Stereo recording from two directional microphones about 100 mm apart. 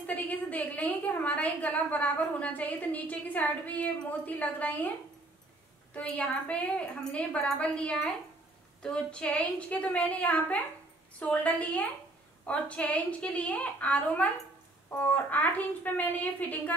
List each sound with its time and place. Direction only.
0.0 s a woman's voice: 15° left (ahead or behind)
5.9 s a woman's voice: 15° left (ahead or behind)